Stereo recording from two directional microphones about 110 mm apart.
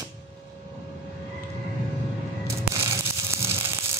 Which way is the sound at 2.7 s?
25° right (ahead or behind).